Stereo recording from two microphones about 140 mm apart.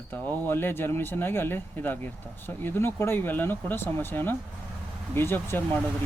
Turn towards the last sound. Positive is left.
turn(degrees=15)  # may be behind; listen again after turning